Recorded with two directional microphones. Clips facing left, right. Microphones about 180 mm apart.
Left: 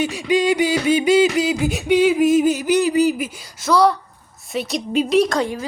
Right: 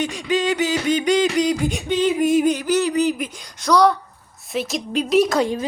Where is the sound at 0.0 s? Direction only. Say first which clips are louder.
Left 3 dB; 10° left (ahead or behind).